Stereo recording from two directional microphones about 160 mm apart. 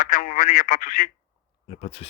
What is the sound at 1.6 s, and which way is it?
Speech, 35° left (ahead or behind).